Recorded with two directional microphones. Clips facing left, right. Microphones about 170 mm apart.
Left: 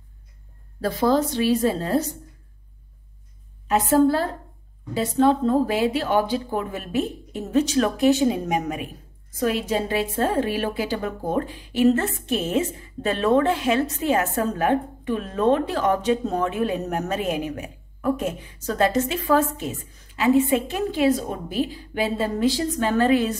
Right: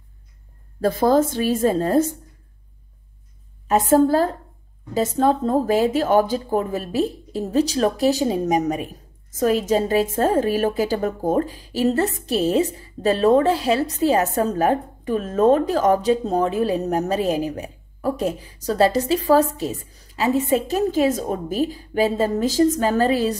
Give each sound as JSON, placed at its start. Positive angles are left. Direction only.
{"t": 0.7, "sound": "a woman's voice", "side_deg": -45}
{"t": 3.6, "sound": "a woman's voice", "side_deg": -45}